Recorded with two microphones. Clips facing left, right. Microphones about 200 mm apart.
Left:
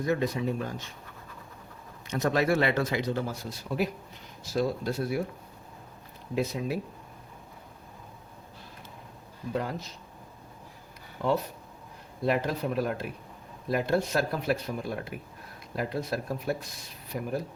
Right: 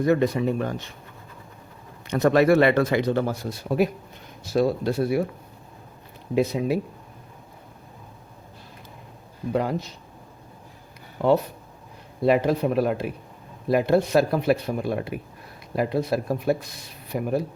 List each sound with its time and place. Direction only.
0.0 s speech: 60° right (ahead or behind)
2.0 s speech: 60° right (ahead or behind)
6.3 s speech: 65° right (ahead or behind)
9.5 s speech: 65° right (ahead or behind)
11.2 s speech: 65° right (ahead or behind)